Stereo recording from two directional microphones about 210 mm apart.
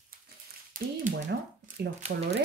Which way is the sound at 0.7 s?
40° right (ahead or behind).